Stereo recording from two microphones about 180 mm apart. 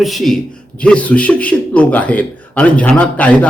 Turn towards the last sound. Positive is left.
turn(degrees=5)  # may be behind; listen again after turning